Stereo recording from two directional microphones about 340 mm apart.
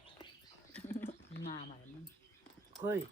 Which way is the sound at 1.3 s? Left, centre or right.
Left.